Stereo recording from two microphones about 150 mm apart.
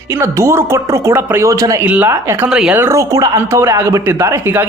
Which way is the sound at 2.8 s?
20° right (ahead or behind).